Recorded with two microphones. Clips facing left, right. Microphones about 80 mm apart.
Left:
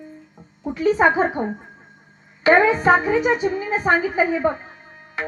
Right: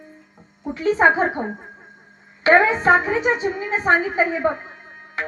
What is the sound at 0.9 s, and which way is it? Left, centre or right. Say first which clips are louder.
Speech: even; right.